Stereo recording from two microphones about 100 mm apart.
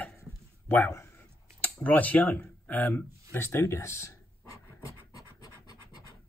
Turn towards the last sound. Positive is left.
turn(degrees=30)  # may be behind; listen again after turning